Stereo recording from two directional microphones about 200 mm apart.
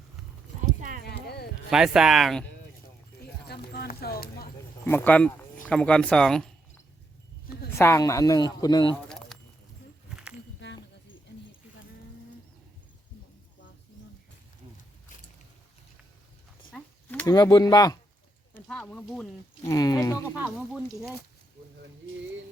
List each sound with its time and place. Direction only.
0.8 s clip-clop: 40° right (ahead or behind)
1.0 s horse: 55° left (ahead or behind)
1.7 s speech: centre (ahead or behind)
3.4 s clip-clop: 55° left (ahead or behind)
4.9 s speech: 10° left (ahead or behind)
7.7 s speech: 15° left (ahead or behind)
9.0 s a sound: 5° left (ahead or behind)
16.7 s a sound: 10° left (ahead or behind)
17.3 s speech: 20° left (ahead or behind)
18.7 s speech: 5° left (ahead or behind)
19.7 s speech: 20° left (ahead or behind)
20.2 s speech: 5° right (ahead or behind)